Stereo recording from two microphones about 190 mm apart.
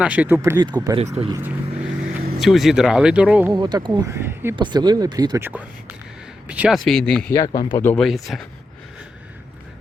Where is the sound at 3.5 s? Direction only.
20° right (ahead or behind).